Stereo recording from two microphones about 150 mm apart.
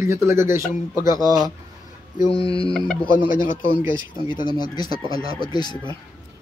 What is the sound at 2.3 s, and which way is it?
Fowl, 40° left (ahead or behind).